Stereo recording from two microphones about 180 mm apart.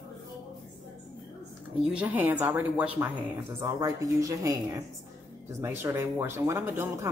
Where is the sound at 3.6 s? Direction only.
20° right (ahead or behind).